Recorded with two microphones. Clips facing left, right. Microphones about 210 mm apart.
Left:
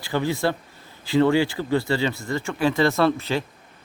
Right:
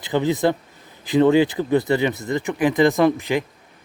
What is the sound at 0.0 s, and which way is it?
A man's voice, 20° right (ahead or behind).